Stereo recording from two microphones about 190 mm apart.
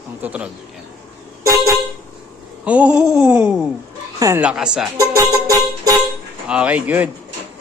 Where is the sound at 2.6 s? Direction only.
5° right (ahead or behind).